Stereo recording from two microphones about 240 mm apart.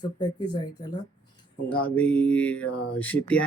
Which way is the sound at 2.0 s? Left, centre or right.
Centre.